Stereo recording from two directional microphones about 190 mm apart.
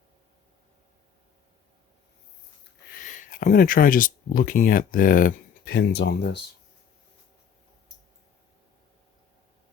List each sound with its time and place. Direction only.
2.9 s speech: 45° left (ahead or behind); by 6.4 s 65° left (ahead or behind)